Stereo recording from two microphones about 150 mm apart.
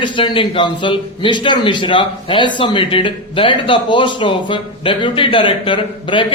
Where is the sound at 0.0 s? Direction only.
35° left (ahead or behind).